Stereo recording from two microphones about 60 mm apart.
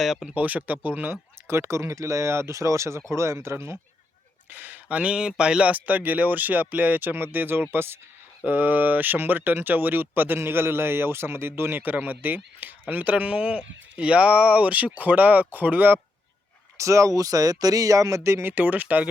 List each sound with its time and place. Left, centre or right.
0.0 s speech: centre
0.3 s speech: right
1.5 s speech: right
4.4 s speech: right
16.7 s speech: right
18.5 s speech: right